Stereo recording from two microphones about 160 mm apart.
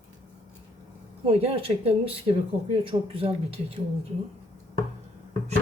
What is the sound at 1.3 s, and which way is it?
Speech, 35° right (ahead or behind).